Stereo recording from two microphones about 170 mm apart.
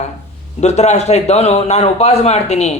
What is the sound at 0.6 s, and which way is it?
Speech, 40° left (ahead or behind).